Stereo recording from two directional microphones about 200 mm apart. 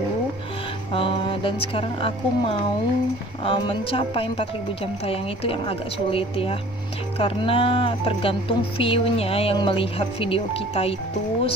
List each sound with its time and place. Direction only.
0.9 s speech: 25° left (ahead or behind)